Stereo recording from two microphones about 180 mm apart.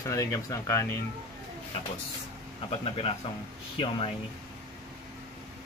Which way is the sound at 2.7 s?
30° left (ahead or behind).